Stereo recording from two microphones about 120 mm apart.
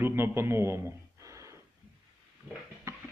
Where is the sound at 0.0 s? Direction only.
20° right (ahead or behind).